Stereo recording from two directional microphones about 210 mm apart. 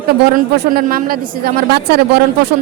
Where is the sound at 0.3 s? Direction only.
45° right (ahead or behind).